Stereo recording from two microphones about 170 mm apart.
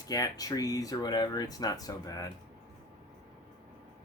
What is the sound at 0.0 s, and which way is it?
Speech, 20° left (ahead or behind).